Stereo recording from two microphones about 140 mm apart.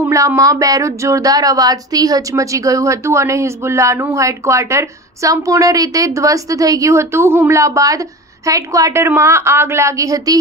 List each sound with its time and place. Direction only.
0.0 s speech: 20° right (ahead or behind)